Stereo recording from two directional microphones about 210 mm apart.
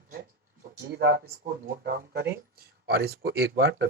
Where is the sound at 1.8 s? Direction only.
50° right (ahead or behind).